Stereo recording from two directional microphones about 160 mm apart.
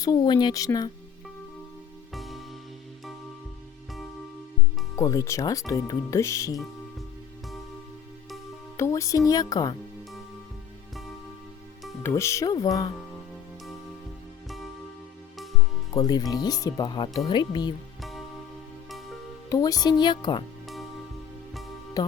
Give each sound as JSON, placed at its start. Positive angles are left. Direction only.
{"t": 0.0, "sound": "speech", "side_deg": 25}
{"t": 2.1, "sound": "music", "side_deg": 0}
{"t": 4.9, "sound": "speech", "side_deg": 20}
{"t": 8.8, "sound": "speech", "side_deg": 20}
{"t": 12.0, "sound": "speech", "side_deg": 15}
{"t": 16.0, "sound": "speech", "side_deg": 25}
{"t": 18.0, "sound": "music", "side_deg": 0}
{"t": 19.5, "sound": "speech", "side_deg": 20}
{"t": 22.0, "sound": "speech", "side_deg": 20}